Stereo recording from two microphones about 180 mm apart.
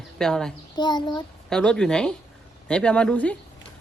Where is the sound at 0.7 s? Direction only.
25° left (ahead or behind).